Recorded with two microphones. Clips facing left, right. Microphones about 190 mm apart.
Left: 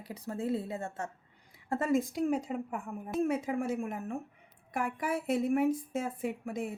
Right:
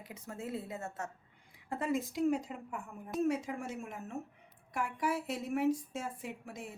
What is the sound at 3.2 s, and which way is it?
A woman's voice, 55° left (ahead or behind).